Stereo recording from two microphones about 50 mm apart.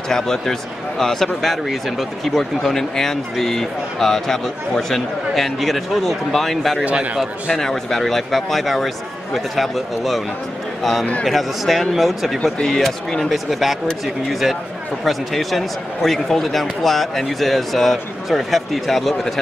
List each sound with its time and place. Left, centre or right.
0.1 s speech: centre
6.8 s a man's voice: right
7.5 s a man's voice: centre
12.5 s speech: centre
13.3 s speech: centre